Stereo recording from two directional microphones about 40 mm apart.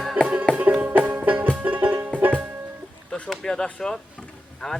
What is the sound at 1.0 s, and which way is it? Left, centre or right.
Music, right.